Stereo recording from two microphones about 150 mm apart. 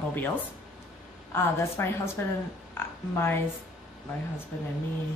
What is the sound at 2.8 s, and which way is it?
Oink, 15° left (ahead or behind).